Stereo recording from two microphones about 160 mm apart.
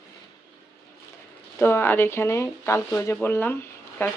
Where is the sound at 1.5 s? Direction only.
15° left (ahead or behind).